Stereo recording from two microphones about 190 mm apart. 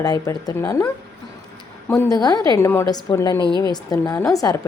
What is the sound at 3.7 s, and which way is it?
Speech, 20° left (ahead or behind).